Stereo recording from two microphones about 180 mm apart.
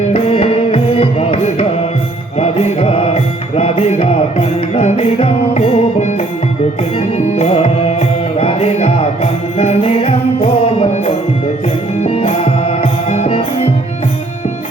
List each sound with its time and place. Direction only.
0.1 s music: 30° left (ahead or behind)
7.3 s music: 35° left (ahead or behind)